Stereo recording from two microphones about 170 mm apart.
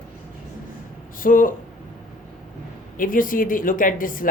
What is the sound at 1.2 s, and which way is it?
Speech, 55° left (ahead or behind).